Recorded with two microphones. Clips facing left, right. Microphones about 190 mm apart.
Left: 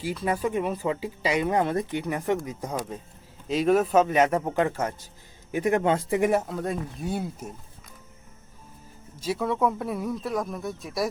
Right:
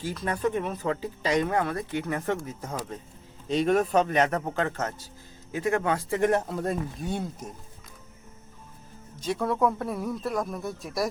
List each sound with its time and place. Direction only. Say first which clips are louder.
0.0 s a man's voice: left 1 dB; 10° left (ahead or behind)
6.1 s speech: left 1 dB; 10° left (ahead or behind)
9.2 s speech: even; 5° left (ahead or behind)